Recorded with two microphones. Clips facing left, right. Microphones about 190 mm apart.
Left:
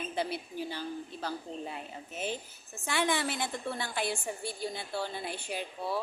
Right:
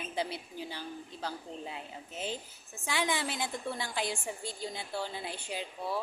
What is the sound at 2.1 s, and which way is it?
Speech, 15° left (ahead or behind).